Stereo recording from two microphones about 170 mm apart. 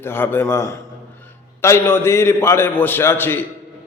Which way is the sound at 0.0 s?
15° left (ahead or behind).